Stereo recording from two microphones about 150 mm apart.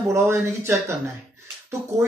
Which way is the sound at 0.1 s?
20° right (ahead or behind).